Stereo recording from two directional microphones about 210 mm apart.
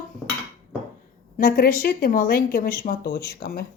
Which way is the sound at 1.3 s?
45° left (ahead or behind).